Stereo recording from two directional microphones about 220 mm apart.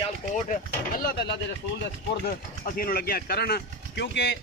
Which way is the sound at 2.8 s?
40° left (ahead or behind).